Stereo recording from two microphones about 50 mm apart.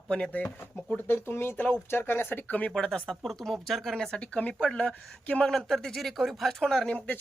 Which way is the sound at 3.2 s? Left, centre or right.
Centre.